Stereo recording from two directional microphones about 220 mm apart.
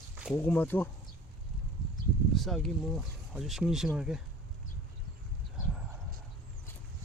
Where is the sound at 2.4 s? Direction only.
Centre (ahead or behind).